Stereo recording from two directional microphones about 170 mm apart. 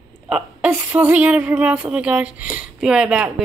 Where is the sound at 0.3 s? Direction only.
5° right (ahead or behind).